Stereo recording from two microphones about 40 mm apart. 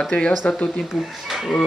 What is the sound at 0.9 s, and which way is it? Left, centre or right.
Speech, centre.